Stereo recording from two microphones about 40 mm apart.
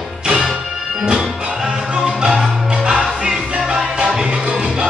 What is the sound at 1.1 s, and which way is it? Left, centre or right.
Music, centre.